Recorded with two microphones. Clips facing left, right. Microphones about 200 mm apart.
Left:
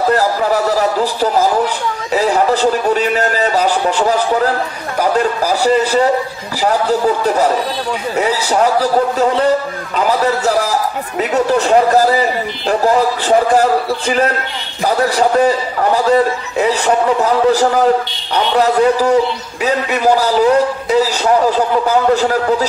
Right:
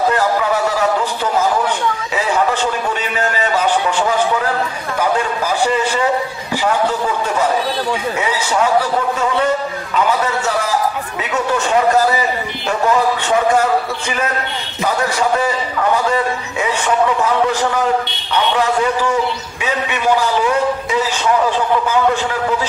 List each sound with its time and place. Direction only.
0.1 s a man's voice: 35° left (ahead or behind)
2.1 s a sound: 35° left (ahead or behind)
5.1 s a man's voice: 35° left (ahead or behind)